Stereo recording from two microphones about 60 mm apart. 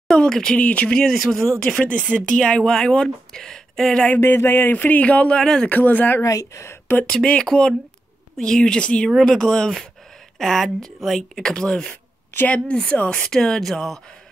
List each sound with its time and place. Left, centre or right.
0.1 s speech: centre
0.6 s speech: left
0.9 s speech: centre
1.7 s speech: centre
4.2 s speech: left
4.7 s speech: left
5.7 s speech: left
6.2 s a woman's voice: left
6.9 s speech: left
7.3 s speech: centre
9.2 s speech: centre; by 13.2 s left
13.2 s speech: centre